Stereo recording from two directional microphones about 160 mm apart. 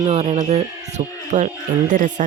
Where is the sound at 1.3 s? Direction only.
50° right (ahead or behind).